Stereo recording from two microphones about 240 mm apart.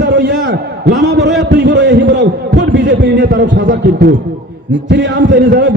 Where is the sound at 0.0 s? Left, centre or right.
Right.